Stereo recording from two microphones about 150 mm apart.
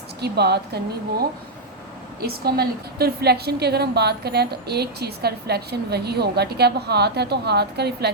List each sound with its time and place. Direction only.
0.2 s a woman's voice: 90° right
2.2 s a woman's voice: 90° right